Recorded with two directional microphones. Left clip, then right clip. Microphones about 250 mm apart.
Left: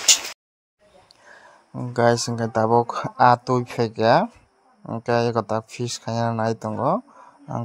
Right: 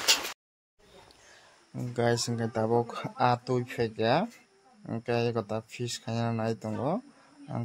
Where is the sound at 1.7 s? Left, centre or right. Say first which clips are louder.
Left 9 dB; left.